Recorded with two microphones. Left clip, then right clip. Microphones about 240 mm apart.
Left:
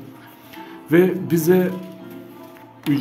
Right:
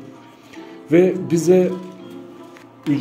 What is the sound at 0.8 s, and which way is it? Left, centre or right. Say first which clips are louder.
Speech: right 2 dB; centre.